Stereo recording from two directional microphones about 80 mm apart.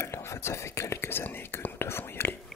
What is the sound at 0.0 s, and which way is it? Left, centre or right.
Speech, left.